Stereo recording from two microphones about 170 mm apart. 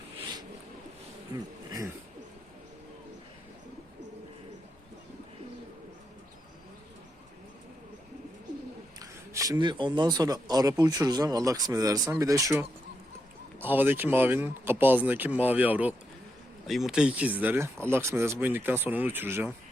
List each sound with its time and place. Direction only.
9.0 s speech: 20° right (ahead or behind)